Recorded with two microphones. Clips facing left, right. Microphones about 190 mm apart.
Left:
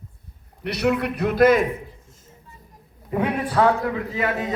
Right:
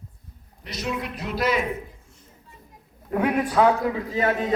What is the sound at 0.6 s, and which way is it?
A man's voice, 65° left (ahead or behind).